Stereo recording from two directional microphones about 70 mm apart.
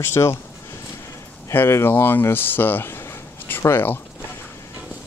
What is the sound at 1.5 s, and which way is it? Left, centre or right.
Speech, left.